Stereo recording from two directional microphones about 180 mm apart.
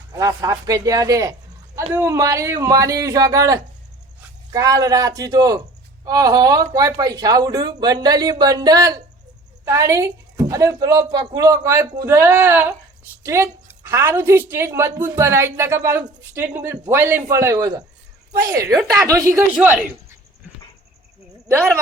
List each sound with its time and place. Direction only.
0.1 s a woman's voice: 20° right (ahead or behind)
19.0 s a woman's voice: 15° right (ahead or behind)